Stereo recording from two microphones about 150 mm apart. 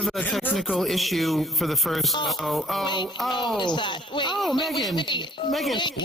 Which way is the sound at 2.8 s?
30° left (ahead or behind).